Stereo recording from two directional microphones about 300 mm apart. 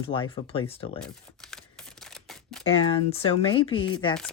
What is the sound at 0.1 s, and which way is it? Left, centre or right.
Speech, centre.